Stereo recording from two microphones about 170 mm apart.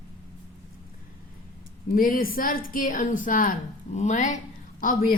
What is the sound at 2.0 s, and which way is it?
A woman's voice, 55° left (ahead or behind).